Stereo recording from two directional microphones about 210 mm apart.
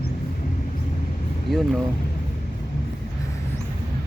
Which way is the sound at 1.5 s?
Centre (ahead or behind).